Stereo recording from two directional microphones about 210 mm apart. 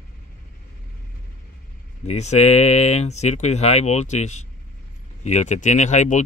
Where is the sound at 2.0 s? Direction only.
30° left (ahead or behind).